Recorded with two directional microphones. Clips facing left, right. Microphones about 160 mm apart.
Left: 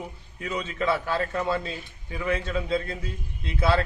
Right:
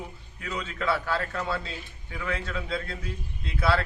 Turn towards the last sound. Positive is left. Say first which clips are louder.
# left 2 dB
turn(degrees=20)  # may be behind; listen again after turning